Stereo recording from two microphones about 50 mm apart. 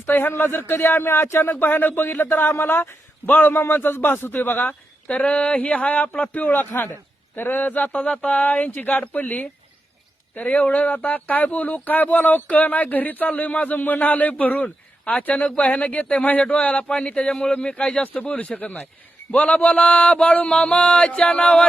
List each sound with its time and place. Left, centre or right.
0.0 s a man's voice: left
1.5 s a man's voice: left
5.0 s a man's voice: left